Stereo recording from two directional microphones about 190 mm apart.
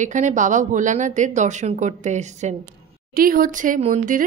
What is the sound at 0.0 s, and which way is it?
Speech, 40° right (ahead or behind).